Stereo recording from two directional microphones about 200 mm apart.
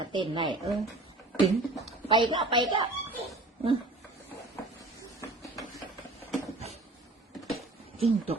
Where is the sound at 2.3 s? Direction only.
25° right (ahead or behind).